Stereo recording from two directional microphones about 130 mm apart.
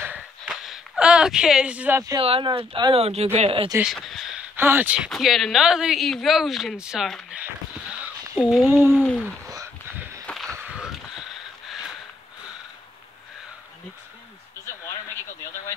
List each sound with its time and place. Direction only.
0.5 s a sound: 5° right (ahead or behind)
2.1 s speech: 40° right (ahead or behind)
3.8 s speech: centre (ahead or behind)
4.6 s speech: 15° right (ahead or behind)
5.1 s speech: centre (ahead or behind)
8.4 s speech: centre (ahead or behind)
8.6 s speech: 20° right (ahead or behind)
10.2 s a sound: 5° left (ahead or behind)